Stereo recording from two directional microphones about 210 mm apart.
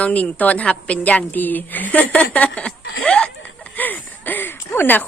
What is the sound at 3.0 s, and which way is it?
Chuckle, 5° left (ahead or behind).